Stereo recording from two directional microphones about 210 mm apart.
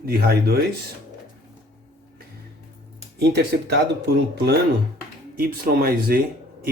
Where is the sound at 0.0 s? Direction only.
45° right (ahead or behind).